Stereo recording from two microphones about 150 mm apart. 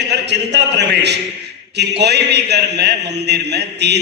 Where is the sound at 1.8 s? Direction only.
90° right.